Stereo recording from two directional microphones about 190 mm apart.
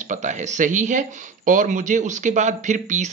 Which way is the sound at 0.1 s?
40° right (ahead or behind).